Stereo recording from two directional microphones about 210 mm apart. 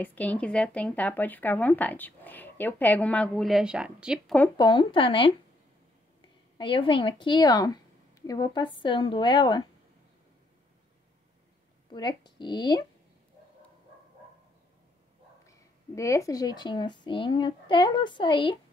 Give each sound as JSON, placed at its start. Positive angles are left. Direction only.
{"t": 0.0, "sound": "speech", "side_deg": 10}
{"t": 4.6, "sound": "speech", "side_deg": 20}
{"t": 6.6, "sound": "speech", "side_deg": 25}
{"t": 11.9, "sound": "speech", "side_deg": 20}
{"t": 15.4, "sound": "speech", "side_deg": 15}